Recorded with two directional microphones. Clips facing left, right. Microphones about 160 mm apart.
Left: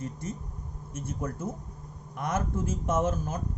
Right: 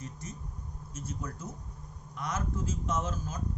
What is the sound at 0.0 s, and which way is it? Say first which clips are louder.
A man's voice: left 7 dB; 55° left (ahead or behind).